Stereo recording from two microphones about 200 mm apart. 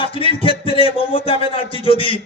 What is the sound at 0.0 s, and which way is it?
A man's voice, 25° left (ahead or behind).